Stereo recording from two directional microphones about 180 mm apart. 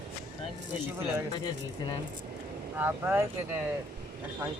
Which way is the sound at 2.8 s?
10° right (ahead or behind).